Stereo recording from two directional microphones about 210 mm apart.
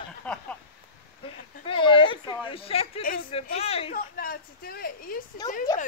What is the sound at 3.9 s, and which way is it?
Speech, 45° left (ahead or behind).